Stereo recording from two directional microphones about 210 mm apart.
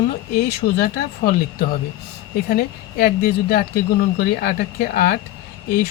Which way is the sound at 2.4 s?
45° left (ahead or behind).